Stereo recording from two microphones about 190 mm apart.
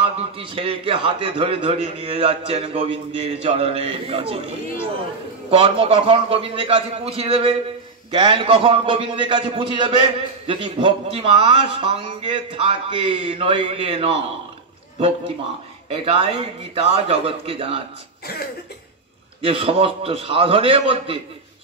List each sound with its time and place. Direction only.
0.0 s a man's voice: 30° right (ahead or behind)
5.5 s a man's voice: 30° right (ahead or behind)
19.4 s a man's voice: 30° right (ahead or behind)